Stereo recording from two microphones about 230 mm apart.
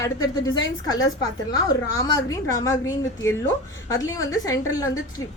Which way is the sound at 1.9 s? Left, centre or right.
Centre.